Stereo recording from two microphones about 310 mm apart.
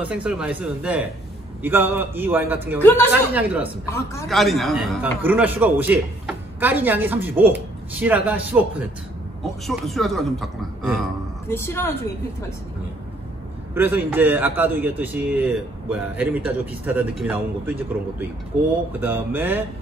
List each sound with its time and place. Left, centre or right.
0.0 s a man's voice: centre
2.8 s a woman's voice: centre
3.1 s speech: centre
3.9 s speech: centre
13.7 s speech: centre
18.9 s a man's voice: centre